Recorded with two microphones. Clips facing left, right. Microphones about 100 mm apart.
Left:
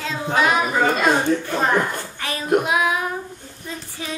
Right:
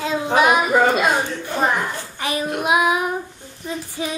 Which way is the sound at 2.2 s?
15° right (ahead or behind).